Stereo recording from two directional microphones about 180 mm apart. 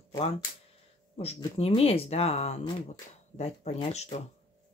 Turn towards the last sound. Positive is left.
turn(degrees=35)  # may be behind; listen again after turning